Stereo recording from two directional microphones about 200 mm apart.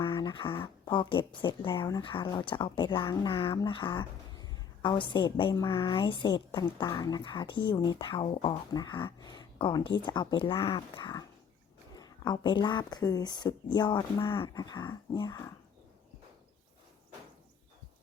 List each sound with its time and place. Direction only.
0.0 s speech: 25° left (ahead or behind)